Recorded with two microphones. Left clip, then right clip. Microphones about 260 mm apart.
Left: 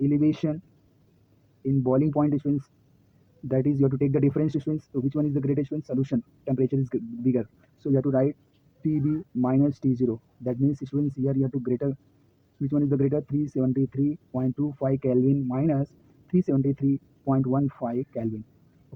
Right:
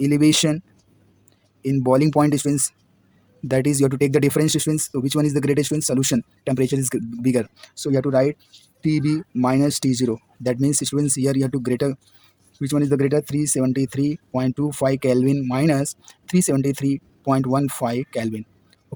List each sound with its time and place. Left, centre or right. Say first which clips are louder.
0.0 s speech: right 7 dB; right
1.6 s speech: right 6 dB; right